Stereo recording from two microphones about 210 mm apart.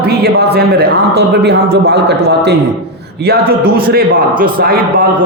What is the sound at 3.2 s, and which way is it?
A man's voice, 50° right (ahead or behind).